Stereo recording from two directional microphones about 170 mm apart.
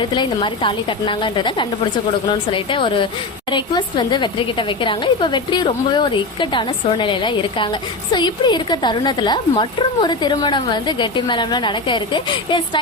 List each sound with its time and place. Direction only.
0.0 s a woman's voice: 30° left (ahead or behind)